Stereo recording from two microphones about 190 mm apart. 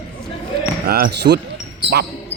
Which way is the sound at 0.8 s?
55° right (ahead or behind).